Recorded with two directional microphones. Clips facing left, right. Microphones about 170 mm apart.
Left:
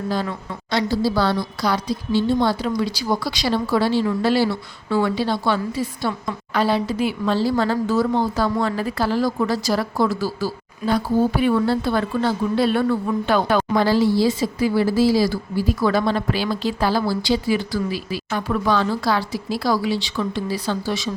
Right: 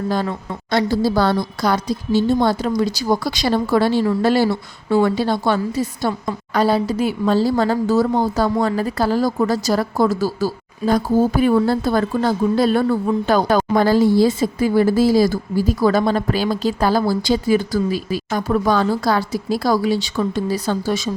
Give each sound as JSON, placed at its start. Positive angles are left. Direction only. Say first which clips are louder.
{"t": 0.1, "sound": "a woman's voice", "louder": "right 3 dB", "side_deg": -50}